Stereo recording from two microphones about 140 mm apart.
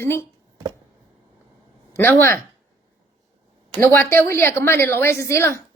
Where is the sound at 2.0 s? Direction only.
15° left (ahead or behind).